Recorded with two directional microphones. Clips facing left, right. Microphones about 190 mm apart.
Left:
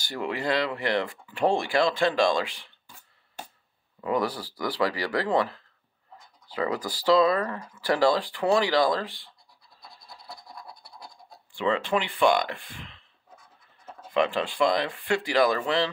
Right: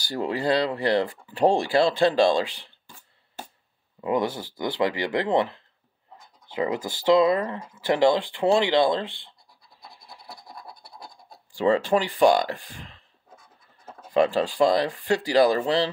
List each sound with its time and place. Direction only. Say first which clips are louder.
0.0 s speech: right 4 dB; 35° right (ahead or behind)
4.0 s speech: right 2 dB; 25° right (ahead or behind)
11.5 s speech: right 5 dB; 40° right (ahead or behind)
14.1 s speech: right 4 dB; 35° right (ahead or behind)